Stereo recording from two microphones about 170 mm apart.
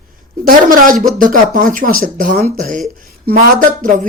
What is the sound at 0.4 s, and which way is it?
Speech, 55° right (ahead or behind).